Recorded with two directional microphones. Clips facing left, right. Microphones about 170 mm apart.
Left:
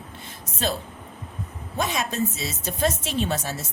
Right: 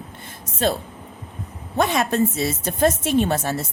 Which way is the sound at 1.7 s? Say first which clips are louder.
Right 6 dB; 60° right (ahead or behind).